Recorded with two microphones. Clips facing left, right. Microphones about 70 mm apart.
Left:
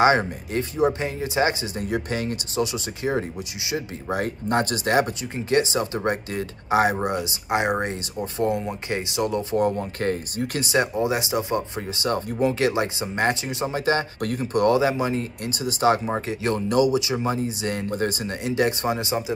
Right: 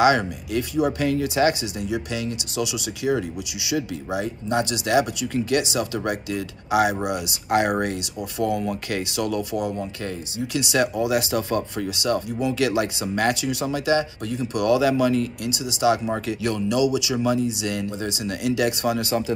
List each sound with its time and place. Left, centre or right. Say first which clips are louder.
0.0 s speech: even; left
1.8 s speech: left 1 dB; left
9.6 s speech: left 4 dB; left
10.7 s speech: right 1 dB; left
14.2 s speech: left 1 dB; left
14.5 s speech: even; left; by 19.3 s centre